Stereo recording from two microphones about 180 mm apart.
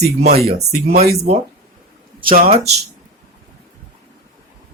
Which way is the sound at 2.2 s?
55° right (ahead or behind).